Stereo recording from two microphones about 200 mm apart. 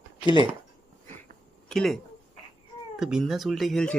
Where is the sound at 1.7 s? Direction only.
Centre (ahead or behind).